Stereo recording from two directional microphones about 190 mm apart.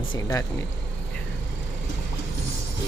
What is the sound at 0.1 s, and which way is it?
Speech, 15° left (ahead or behind).